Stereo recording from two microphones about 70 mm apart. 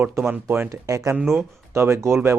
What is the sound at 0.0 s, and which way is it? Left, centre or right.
Speech, right.